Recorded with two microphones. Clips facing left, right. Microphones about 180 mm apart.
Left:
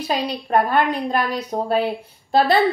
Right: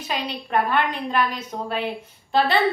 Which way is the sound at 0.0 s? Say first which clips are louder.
Left 5 dB; 40° left (ahead or behind).